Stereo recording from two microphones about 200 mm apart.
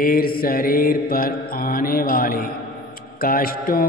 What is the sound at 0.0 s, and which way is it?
A man's voice, 45° left (ahead or behind).